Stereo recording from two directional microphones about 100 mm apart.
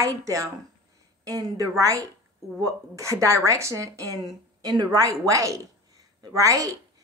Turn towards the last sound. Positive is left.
turn(degrees=-35)  # may be behind; listen again after turning